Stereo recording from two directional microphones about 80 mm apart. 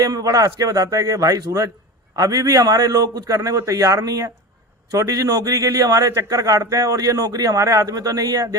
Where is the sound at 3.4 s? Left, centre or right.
Right.